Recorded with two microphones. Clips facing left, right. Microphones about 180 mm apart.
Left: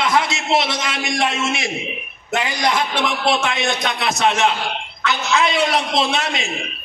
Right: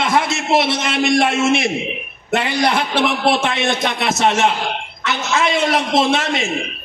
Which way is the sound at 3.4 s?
25° right (ahead or behind).